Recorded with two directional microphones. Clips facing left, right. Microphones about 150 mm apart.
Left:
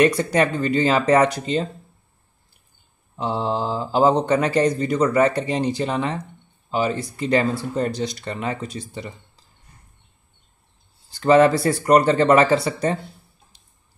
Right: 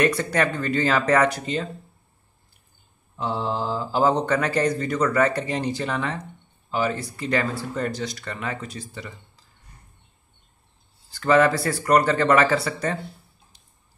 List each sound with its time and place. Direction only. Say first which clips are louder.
0.0 s speech: left 4 dB; 20° left (ahead or behind)
3.2 s speech: left 3 dB; 20° left (ahead or behind)
11.1 s speech: left 4 dB; 25° left (ahead or behind)